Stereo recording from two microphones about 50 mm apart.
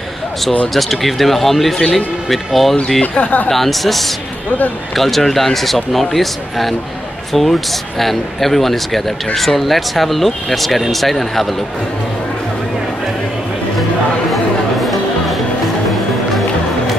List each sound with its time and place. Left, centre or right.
0.7 s speech: centre
2.2 s speech: centre
3.0 s speech: left
3.4 s speech: centre
14.3 s music: centre